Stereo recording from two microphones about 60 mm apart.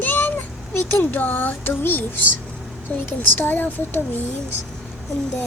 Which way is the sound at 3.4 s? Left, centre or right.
Left.